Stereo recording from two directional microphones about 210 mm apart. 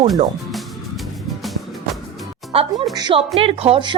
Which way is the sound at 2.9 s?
20° right (ahead or behind).